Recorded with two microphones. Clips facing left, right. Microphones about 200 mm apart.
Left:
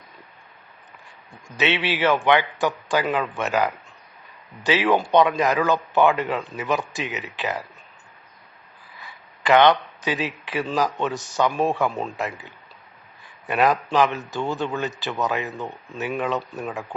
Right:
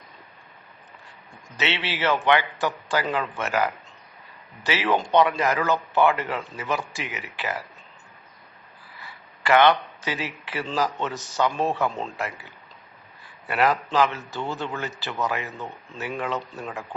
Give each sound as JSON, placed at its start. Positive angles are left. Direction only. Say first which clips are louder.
{"t": 1.5, "sound": "a man's voice", "louder": "left 5 dB", "side_deg": 15}
{"t": 9.0, "sound": "a man's voice", "louder": "left 1 dB", "side_deg": 15}